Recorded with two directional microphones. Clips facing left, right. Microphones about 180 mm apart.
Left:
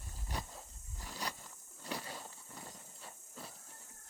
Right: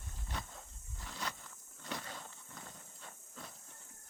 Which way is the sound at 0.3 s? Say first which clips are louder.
Left 2 dB; 10° left (ahead or behind).